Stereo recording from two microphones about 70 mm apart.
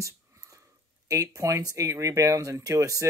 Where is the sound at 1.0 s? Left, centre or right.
Right.